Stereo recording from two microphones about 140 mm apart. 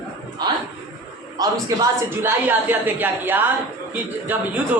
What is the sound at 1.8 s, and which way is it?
A woman's voice, 15° right (ahead or behind).